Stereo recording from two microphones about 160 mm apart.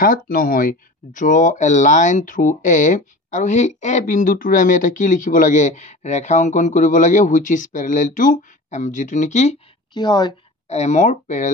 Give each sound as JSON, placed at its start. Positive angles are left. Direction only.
{"t": 0.0, "sound": "speech", "side_deg": 60}
{"t": 9.9, "sound": "a woman's voice", "side_deg": 25}
{"t": 10.7, "sound": "speech", "side_deg": 45}